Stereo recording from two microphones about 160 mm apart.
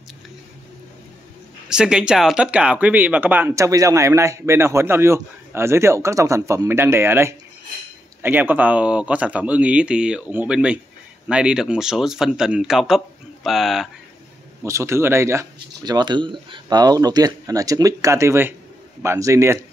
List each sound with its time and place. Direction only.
1.7 s speech: 5° right (ahead or behind)
14.6 s speech: 15° right (ahead or behind)